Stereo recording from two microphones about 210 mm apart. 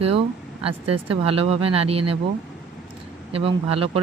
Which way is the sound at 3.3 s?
25° right (ahead or behind).